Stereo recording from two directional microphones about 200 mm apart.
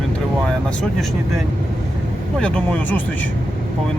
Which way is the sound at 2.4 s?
5° left (ahead or behind).